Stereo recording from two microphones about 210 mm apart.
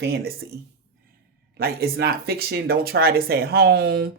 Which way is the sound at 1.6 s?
50° right (ahead or behind).